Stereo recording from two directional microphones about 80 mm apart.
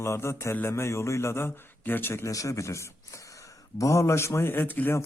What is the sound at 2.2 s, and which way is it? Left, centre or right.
A man's voice, left.